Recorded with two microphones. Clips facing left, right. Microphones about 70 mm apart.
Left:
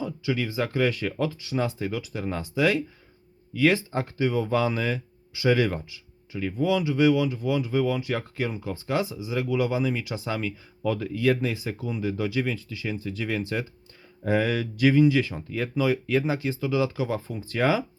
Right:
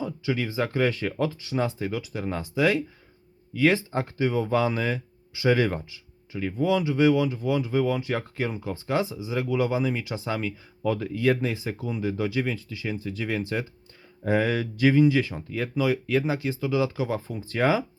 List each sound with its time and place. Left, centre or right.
0.0 s speech: right
1.5 s speech: right
15.4 s speech: centre; by 17.8 s right